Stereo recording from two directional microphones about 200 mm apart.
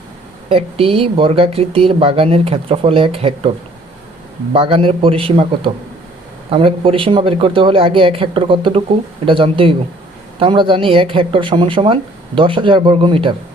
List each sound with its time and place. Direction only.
0.5 s speech: 30° right (ahead or behind)
4.5 s speech: 30° right (ahead or behind)